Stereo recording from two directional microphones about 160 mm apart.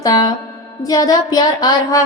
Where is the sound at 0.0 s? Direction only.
25° left (ahead or behind).